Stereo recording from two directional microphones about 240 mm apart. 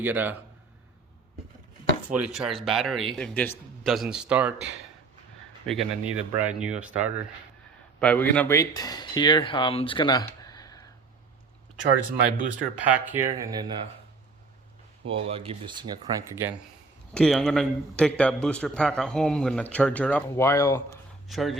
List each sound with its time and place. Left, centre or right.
0.0 s speech: centre
2.0 s a man's voice: centre
7.9 s speech: centre
12.7 s speech: centre
15.0 s speech: right
17.2 s a man's voice: centre
21.2 s speech: centre